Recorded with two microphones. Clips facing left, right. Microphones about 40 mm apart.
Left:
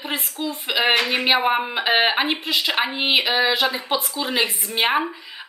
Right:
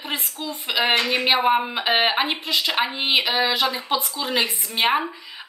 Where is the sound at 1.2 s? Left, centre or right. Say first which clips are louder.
Even; centre.